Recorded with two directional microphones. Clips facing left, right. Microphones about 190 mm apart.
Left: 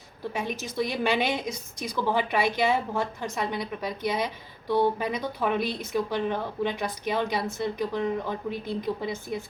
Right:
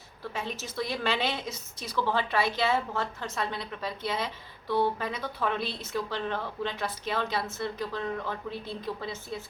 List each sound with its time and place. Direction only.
0.3 s speech: 15° left (ahead or behind)